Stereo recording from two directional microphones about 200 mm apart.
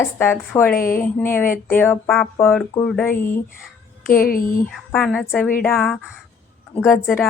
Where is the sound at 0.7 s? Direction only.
45° left (ahead or behind).